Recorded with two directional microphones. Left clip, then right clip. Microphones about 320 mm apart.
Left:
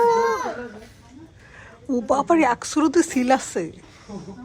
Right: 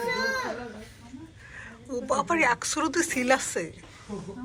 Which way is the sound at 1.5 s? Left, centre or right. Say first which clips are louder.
Left 9 dB; centre.